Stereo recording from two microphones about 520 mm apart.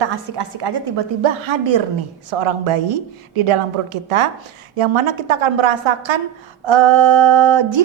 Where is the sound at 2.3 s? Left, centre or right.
Right.